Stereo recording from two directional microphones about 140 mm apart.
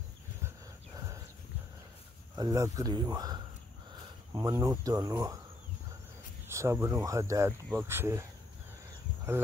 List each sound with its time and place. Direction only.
0.9 s horse: 25° right (ahead or behind)
2.3 s speech: 25° right (ahead or behind)
6.4 s speech: 20° right (ahead or behind)